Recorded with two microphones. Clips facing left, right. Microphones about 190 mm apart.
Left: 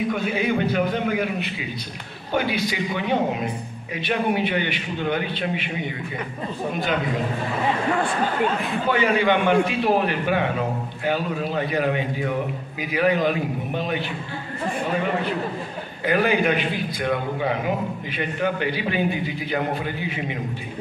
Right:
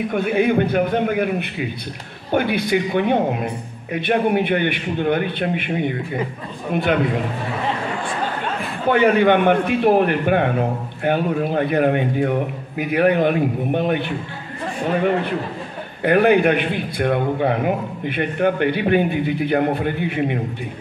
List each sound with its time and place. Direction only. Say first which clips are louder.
0.1 s a man's voice: right 5 dB; 55° right (ahead or behind)
8.9 s a man's voice: right 6 dB; 55° right (ahead or behind)
16.0 s a man's voice: right 6 dB; 60° right (ahead or behind)